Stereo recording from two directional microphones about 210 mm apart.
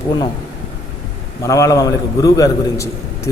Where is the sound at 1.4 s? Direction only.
15° left (ahead or behind).